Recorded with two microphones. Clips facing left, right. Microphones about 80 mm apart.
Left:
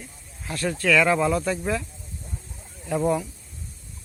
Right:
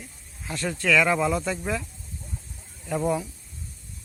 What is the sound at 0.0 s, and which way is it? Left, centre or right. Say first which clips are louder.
Speech: left 1 dB; centre.